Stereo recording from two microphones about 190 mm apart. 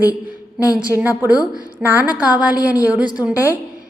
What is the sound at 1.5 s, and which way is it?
A woman's voice, 10° right (ahead or behind).